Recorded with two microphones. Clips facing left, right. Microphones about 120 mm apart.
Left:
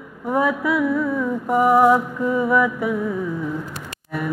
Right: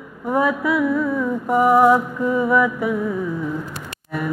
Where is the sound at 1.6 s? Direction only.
15° right (ahead or behind).